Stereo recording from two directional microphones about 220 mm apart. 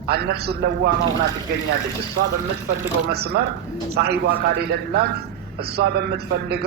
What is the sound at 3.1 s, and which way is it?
A man's voice, 45° right (ahead or behind).